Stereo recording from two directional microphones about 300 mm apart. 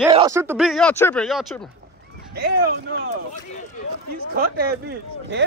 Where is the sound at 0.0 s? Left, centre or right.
Centre.